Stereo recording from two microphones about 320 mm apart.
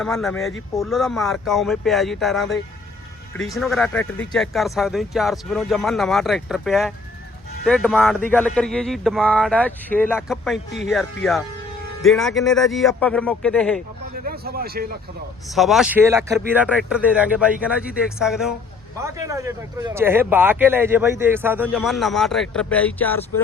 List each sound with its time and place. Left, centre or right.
0.0 s speech: centre
14.3 s a man's voice: right
15.5 s speech: centre